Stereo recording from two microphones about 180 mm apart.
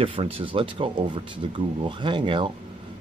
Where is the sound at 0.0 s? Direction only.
35° right (ahead or behind).